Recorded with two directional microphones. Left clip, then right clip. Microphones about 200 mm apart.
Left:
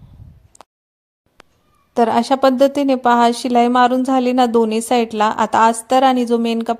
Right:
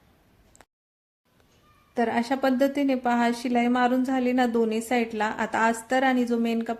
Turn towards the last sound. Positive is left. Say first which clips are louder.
# left 9 dB
turn(degrees=30)  # may be behind; listen again after turning